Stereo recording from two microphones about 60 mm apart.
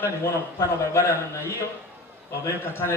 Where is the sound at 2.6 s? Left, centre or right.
Left.